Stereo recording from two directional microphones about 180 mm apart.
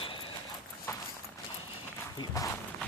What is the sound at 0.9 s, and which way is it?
Clip-clop, 15° left (ahead or behind).